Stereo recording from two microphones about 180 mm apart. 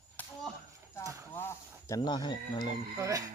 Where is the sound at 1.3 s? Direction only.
15° left (ahead or behind).